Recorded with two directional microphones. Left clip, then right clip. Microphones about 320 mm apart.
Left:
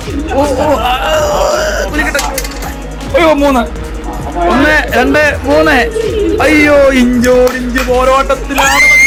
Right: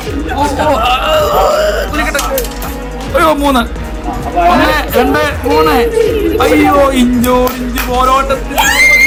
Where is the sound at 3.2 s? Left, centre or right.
Centre.